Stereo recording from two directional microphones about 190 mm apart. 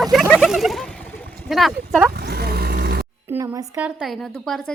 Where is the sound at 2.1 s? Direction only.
55° right (ahead or behind).